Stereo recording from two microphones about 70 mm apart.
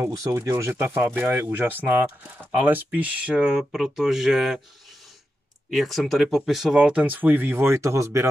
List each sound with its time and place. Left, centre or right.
0.2 s speech: right; by 4.6 s centre
5.7 s speech: centre
6.8 s speech: centre; by 8.3 s right